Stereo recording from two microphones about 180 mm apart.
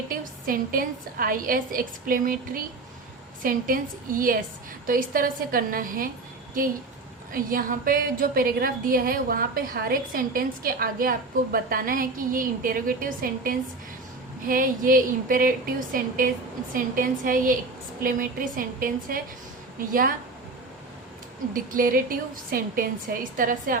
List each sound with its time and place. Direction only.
0.1 s a woman's voice: 50° right (ahead or behind)
7.3 s a woman's voice: 50° right (ahead or behind)
21.5 s a woman's voice: 50° right (ahead or behind)